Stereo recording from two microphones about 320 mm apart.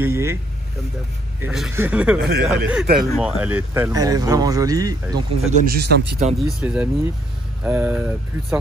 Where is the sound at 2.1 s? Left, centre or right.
Right.